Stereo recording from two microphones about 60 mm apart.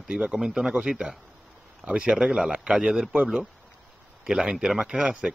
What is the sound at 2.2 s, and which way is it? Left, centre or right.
A man's voice, centre.